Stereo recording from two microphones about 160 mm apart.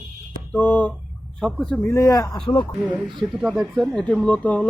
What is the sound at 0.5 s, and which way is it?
Speech, 10° left (ahead or behind).